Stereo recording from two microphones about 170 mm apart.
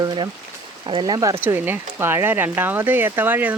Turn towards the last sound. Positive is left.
turn(degrees=-10)  # may be behind; listen again after turning